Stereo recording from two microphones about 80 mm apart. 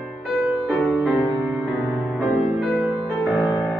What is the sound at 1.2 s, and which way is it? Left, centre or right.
Music, centre.